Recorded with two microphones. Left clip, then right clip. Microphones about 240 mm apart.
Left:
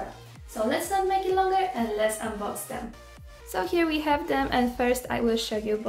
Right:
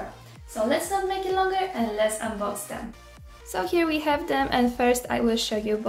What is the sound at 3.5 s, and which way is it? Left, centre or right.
A woman's voice, centre.